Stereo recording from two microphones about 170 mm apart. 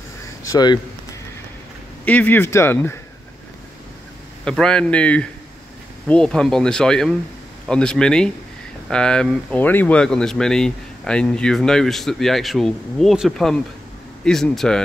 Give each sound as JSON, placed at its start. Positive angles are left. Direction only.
{"t": 0.2, "sound": "a sound", "side_deg": 20}
{"t": 2.0, "sound": "speech", "side_deg": 10}
{"t": 4.5, "sound": "speech", "side_deg": 5}